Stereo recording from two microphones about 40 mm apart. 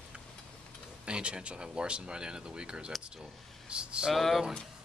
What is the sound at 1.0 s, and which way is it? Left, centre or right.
Speech, right.